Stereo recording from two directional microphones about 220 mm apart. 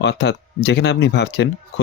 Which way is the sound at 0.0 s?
50° left (ahead or behind).